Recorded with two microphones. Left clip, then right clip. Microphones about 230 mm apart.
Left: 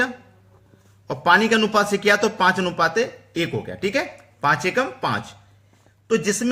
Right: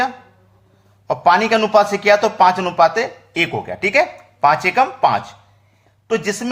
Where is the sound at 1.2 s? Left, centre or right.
Centre.